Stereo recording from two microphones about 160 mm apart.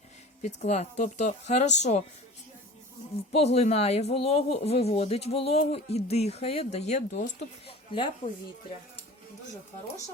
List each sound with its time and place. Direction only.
0.4 s speech: 45° left (ahead or behind)
3.3 s speech: 40° left (ahead or behind)
7.7 s speech: 35° left (ahead or behind)